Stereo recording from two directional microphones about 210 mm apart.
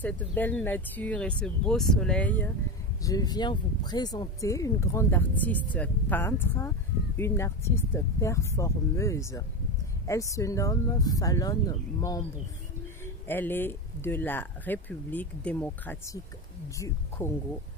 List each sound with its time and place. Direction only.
0.0 s speech: 5° left (ahead or behind)